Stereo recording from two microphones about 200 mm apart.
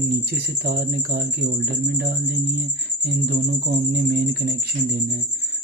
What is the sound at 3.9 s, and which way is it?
Speech, 55° right (ahead or behind).